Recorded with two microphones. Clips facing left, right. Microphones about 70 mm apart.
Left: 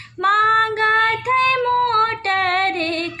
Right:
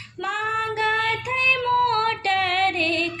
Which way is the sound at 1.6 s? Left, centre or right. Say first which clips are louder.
Left 3 dB; left.